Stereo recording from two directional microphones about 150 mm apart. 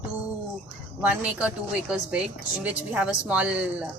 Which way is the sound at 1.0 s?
10° right (ahead or behind).